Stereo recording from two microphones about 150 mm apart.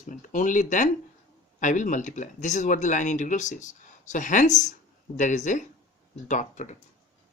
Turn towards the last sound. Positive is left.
turn(degrees=50)  # may be behind; listen again after turning